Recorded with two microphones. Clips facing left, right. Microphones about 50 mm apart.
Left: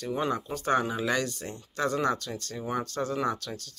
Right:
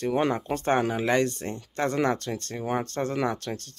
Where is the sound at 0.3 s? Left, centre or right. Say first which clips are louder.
Right 2 dB; right.